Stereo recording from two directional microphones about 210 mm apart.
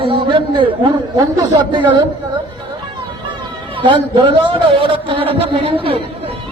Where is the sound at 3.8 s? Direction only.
25° right (ahead or behind).